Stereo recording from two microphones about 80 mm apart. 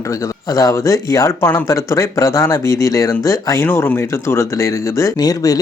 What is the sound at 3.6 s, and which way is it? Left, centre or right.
Speech, left.